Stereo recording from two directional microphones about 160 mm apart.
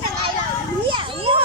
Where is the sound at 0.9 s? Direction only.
35° right (ahead or behind).